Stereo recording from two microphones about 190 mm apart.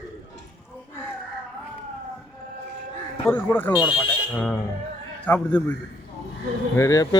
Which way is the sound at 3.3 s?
10° left (ahead or behind).